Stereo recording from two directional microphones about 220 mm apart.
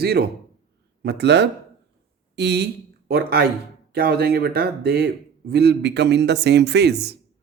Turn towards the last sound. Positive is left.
turn(degrees=-50)  # may be behind; listen again after turning